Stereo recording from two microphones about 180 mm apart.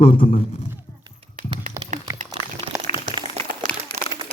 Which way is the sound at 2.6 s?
35° left (ahead or behind).